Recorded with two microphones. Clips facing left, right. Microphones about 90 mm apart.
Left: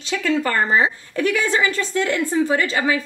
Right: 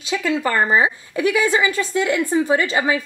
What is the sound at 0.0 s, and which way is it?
A woman's voice, 10° right (ahead or behind).